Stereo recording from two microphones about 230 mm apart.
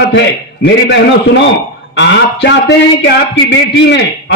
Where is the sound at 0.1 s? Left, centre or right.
Left.